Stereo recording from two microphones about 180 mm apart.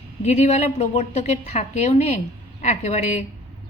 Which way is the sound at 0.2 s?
40° left (ahead or behind).